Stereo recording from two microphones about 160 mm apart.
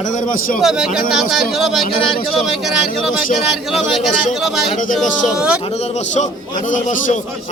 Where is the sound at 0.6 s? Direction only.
5° right (ahead or behind).